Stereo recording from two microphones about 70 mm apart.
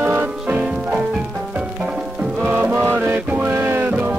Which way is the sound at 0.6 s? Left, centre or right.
Centre.